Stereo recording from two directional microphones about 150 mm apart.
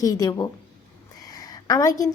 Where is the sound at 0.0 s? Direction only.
25° left (ahead or behind).